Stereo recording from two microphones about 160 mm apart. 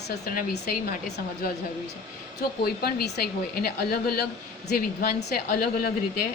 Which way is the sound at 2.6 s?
80° left.